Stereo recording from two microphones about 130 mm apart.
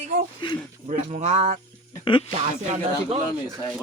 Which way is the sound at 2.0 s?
40° left (ahead or behind).